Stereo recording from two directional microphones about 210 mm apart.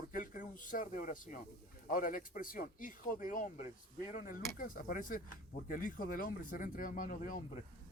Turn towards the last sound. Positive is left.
turn(degrees=40)  # may be behind; listen again after turning